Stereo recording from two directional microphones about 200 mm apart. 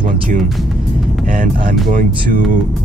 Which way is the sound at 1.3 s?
45° right (ahead or behind).